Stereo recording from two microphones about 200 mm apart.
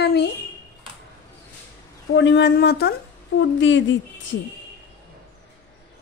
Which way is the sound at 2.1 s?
60° left (ahead or behind).